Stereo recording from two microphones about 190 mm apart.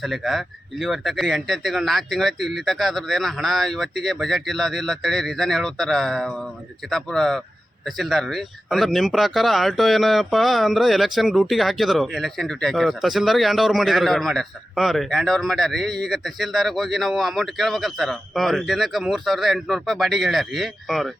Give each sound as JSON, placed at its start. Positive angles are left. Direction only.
{"t": 0.0, "sound": "speech", "side_deg": 0}